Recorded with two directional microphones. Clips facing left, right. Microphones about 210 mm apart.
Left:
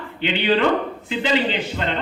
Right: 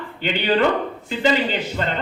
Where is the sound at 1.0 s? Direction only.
45° right (ahead or behind).